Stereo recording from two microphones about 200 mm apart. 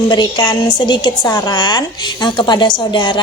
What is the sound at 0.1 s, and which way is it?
A woman's voice, 20° left (ahead or behind).